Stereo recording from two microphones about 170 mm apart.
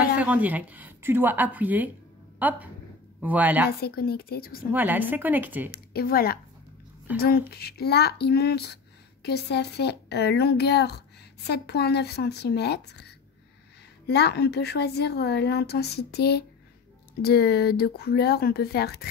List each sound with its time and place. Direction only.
0.0 s speech: 10° right (ahead or behind)
3.8 s speech: 65° left (ahead or behind)
4.7 s speech: 10° right (ahead or behind)
5.7 s a woman's voice: 65° left (ahead or behind)